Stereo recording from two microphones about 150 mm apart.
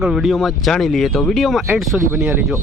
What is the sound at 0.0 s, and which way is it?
Speech, centre (ahead or behind).